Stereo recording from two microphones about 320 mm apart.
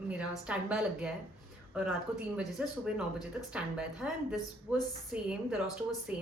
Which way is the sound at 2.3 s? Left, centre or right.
Centre.